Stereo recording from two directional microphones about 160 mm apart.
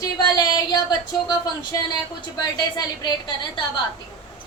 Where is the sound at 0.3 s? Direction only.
25° left (ahead or behind).